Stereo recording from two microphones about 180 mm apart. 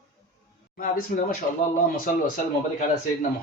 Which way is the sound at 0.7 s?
55° left (ahead or behind).